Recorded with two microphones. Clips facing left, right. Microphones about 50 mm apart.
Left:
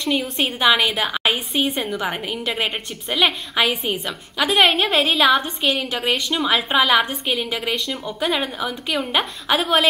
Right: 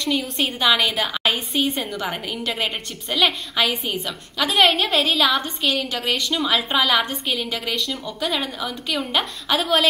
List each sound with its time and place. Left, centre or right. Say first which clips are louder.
0.0 s a woman's voice: left 1 dB; centre